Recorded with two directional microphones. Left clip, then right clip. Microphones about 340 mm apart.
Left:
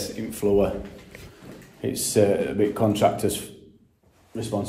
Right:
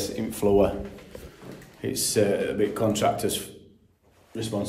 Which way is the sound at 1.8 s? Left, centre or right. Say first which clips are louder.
Left 3 dB; centre.